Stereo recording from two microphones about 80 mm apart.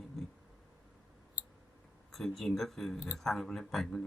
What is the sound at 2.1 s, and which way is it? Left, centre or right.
Speech, centre.